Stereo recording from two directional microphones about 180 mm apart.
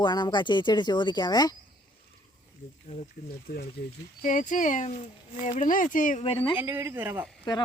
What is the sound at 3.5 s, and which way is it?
Speech, 50° left (ahead or behind).